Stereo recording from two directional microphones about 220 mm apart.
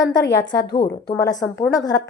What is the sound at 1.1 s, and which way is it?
Speech, 15° left (ahead or behind).